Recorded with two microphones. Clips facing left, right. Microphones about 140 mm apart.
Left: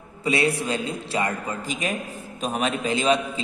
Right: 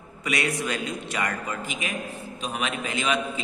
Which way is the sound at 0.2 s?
30° left (ahead or behind).